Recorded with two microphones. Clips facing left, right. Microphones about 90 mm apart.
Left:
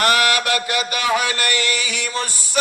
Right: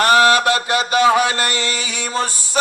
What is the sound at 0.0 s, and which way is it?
Mantra, 30° right (ahead or behind).